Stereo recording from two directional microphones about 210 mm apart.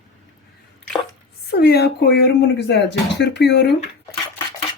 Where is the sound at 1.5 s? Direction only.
50° left (ahead or behind).